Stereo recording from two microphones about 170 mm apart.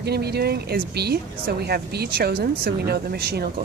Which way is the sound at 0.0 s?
70° right (ahead or behind).